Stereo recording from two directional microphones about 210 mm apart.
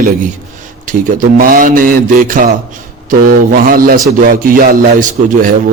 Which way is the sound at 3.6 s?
45° right (ahead or behind).